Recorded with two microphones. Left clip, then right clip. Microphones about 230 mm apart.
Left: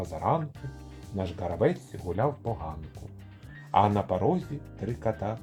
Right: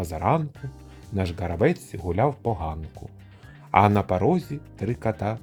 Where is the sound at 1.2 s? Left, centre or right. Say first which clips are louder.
Right 3 dB; right.